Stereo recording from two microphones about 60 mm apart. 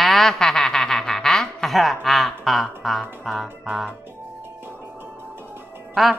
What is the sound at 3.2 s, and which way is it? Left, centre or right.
Speech, centre.